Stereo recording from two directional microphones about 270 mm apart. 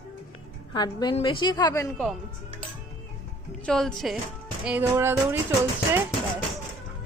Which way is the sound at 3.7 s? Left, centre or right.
Centre.